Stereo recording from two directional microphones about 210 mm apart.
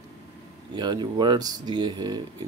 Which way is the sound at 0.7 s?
20° right (ahead or behind).